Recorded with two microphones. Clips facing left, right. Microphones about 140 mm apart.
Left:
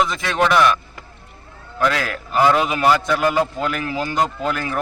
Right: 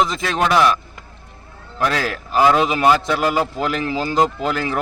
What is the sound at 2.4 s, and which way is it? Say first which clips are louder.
A man's voice: right 1 dB; 15° right (ahead or behind).